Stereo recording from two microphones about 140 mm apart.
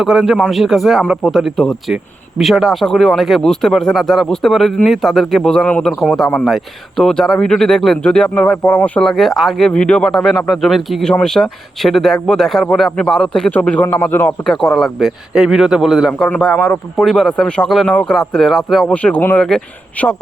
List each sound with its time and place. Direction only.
0.0 s a man's voice: 5° right (ahead or behind)
16.5 s speech: 20° left (ahead or behind)
17.0 s speech: centre (ahead or behind)